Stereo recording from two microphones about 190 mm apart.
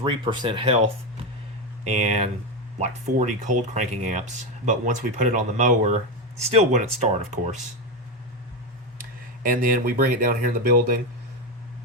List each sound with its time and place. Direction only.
0.0 s speech: 25° right (ahead or behind)
9.0 s speech: 50° right (ahead or behind)